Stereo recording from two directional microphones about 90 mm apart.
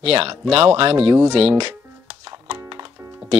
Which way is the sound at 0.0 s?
70° right (ahead or behind).